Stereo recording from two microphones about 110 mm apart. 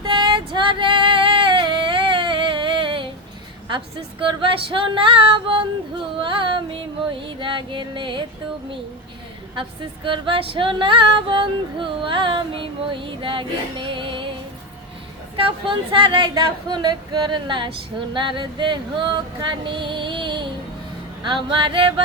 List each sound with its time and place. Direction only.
0.0 s female singing: 45° right (ahead or behind)
4.2 s speech: 50° right (ahead or behind)
9.6 s speech: 50° right (ahead or behind)
15.4 s speech: 50° right (ahead or behind)
21.5 s speech: 50° right (ahead or behind)